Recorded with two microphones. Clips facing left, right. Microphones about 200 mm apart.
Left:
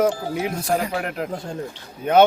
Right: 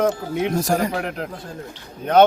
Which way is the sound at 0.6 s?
45° right (ahead or behind).